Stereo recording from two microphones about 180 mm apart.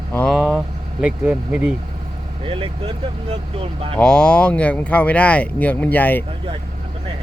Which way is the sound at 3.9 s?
5° left (ahead or behind).